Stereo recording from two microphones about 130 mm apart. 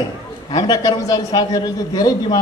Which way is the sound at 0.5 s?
30° left (ahead or behind).